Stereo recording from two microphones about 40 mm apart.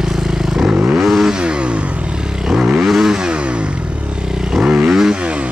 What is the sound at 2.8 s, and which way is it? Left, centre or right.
Motorcycle, centre.